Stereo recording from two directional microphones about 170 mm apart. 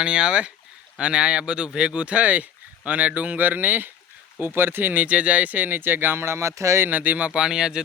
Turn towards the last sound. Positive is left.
turn(degrees=-5)  # may be behind; listen again after turning